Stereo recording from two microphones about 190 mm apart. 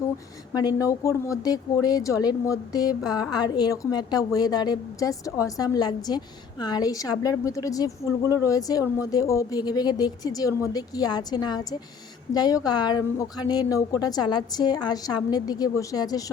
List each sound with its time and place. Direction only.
0.5 s speech: 20° left (ahead or behind)